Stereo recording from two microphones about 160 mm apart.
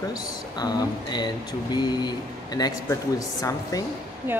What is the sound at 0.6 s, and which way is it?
Speech, 25° left (ahead or behind).